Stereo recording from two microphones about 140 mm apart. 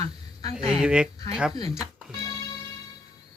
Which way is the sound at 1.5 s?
25° left (ahead or behind).